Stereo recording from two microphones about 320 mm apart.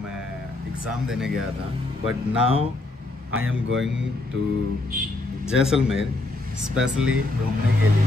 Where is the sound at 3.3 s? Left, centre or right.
Right.